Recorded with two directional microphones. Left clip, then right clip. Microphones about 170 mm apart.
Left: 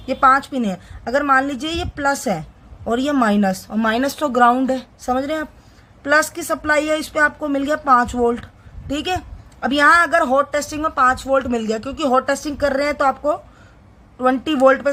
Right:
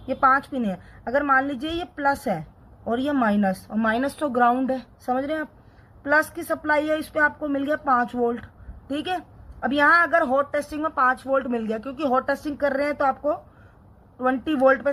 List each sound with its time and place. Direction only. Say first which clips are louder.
0.0 s a woman's voice: left 5 dB; 35° left (ahead or behind)